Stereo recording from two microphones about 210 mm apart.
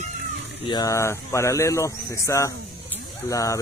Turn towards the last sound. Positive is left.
turn(degrees=15)  # may be behind; listen again after turning